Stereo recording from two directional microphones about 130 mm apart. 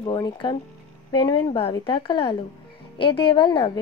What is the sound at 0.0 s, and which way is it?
A woman's voice, 40° left (ahead or behind).